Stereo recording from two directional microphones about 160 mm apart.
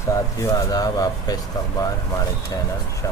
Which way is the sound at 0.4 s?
20° left (ahead or behind).